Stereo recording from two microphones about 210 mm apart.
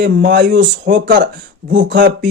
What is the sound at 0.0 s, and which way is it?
Speech, 40° right (ahead or behind).